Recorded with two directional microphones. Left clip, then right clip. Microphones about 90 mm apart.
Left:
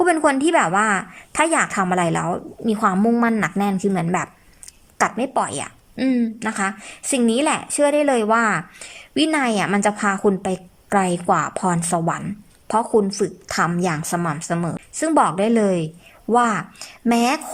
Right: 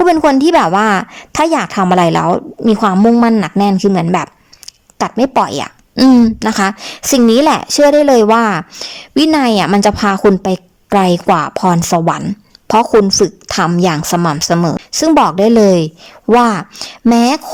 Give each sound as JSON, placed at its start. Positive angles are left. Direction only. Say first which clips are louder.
{"t": 0.0, "sound": "a woman's voice", "louder": "right 8 dB", "side_deg": -40}
{"t": 3.2, "sound": "speech", "louder": "right 8 dB", "side_deg": -25}
{"t": 5.5, "sound": "a woman's voice", "louder": "right 10 dB", "side_deg": -35}
{"t": 6.0, "sound": "speech", "louder": "right 13 dB", "side_deg": -90}
{"t": 6.5, "sound": "a woman's voice", "louder": "right 9 dB", "side_deg": -40}
{"t": 9.4, "sound": "a woman's voice", "louder": "right 8 dB", "side_deg": -25}
{"t": 12.2, "sound": "a woman's voice", "louder": "right 10 dB", "side_deg": -45}
{"t": 13.2, "sound": "a woman's voice", "louder": "right 7 dB", "side_deg": -25}
{"t": 14.4, "sound": "speech", "louder": "right 12 dB", "side_deg": -35}
{"t": 15.5, "sound": "a woman's voice", "louder": "right 10 dB", "side_deg": -35}